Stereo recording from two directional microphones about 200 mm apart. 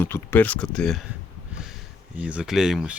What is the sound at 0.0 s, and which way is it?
Speech, 10° left (ahead or behind).